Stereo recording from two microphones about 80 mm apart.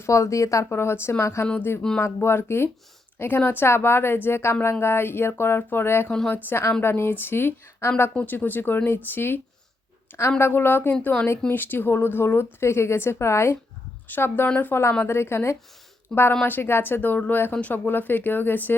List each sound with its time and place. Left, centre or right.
0.0 s speech: left
0.7 s speech: left
6.1 s a woman's voice: centre
6.3 s speech: left
8.1 s speech: left
11.0 s a woman's voice: centre
11.4 s speech: left
16.1 s a woman's voice: centre
16.5 s speech: left